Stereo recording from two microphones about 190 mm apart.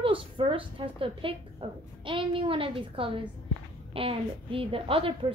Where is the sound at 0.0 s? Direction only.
30° right (ahead or behind).